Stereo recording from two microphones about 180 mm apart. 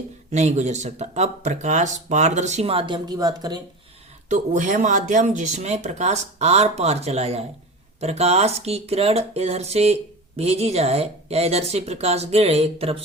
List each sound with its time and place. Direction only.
0.3 s speech: 40° right (ahead or behind); by 3.6 s 20° right (ahead or behind)
4.3 s speech: 45° right (ahead or behind)